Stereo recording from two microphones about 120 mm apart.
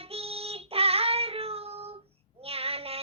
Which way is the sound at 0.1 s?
55° right (ahead or behind).